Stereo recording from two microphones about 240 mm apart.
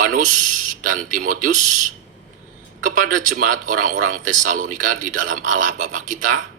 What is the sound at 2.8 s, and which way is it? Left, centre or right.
Speech, right.